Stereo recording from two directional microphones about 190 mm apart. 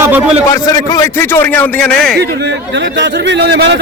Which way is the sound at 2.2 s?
60° right (ahead or behind).